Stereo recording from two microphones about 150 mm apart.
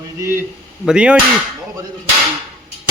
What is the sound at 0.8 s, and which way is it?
Speech, 5° right (ahead or behind).